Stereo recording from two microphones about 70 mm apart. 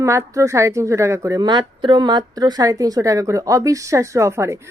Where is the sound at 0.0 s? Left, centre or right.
Right.